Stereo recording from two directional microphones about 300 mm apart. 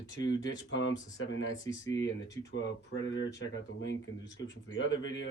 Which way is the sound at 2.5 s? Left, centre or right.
Left.